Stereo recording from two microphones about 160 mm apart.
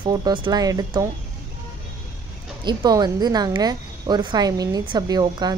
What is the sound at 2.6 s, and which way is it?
Speech, 25° right (ahead or behind).